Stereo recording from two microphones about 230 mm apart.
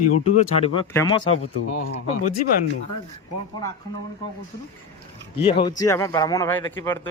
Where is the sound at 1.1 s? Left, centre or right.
Left.